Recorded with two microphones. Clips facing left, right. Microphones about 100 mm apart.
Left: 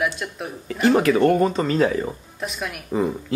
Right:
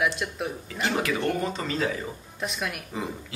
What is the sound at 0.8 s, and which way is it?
Speech, 45° left (ahead or behind).